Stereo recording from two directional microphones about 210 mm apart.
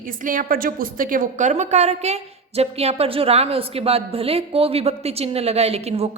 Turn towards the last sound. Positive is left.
turn(degrees=-30)  # may be behind; listen again after turning